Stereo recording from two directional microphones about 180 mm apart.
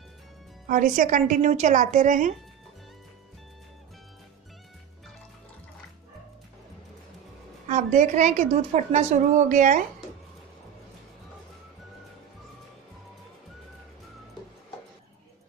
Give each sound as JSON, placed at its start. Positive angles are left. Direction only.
{"t": 0.7, "sound": "a woman's voice", "side_deg": -50}
{"t": 7.6, "sound": "a woman's voice", "side_deg": -40}